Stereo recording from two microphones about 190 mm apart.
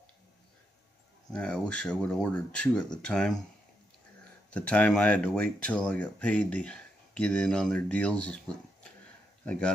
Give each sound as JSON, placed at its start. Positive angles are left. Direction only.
{"t": 1.3, "sound": "speech", "side_deg": 5}
{"t": 4.5, "sound": "speech", "side_deg": 5}
{"t": 9.4, "sound": "speech", "side_deg": 5}